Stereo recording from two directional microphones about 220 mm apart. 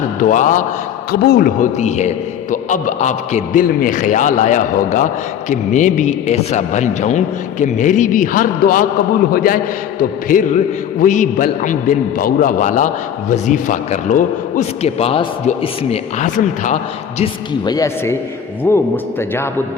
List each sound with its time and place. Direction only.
0.2 s a man's voice: 35° left (ahead or behind)
17.5 s speech: 15° left (ahead or behind)